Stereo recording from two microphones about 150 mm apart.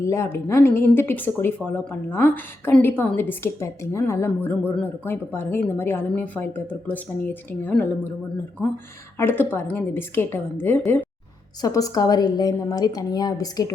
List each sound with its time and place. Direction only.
0.0 s speech: 20° left (ahead or behind)
9.1 s a woman's voice: 15° left (ahead or behind)